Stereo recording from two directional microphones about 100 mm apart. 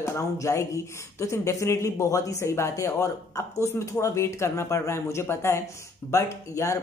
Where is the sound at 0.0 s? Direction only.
30° left (ahead or behind).